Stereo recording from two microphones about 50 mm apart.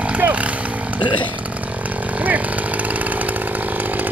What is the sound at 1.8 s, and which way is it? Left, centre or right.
Chainsaw, right.